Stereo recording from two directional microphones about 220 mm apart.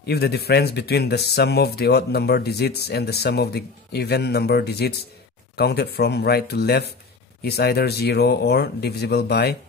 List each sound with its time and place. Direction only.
0.0 s speech: 45° left (ahead or behind)